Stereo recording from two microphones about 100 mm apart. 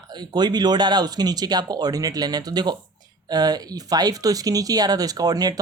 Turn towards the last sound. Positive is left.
turn(degrees=-40)  # may be behind; listen again after turning